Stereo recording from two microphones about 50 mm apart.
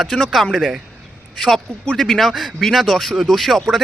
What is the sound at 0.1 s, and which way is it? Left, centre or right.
Speech, centre.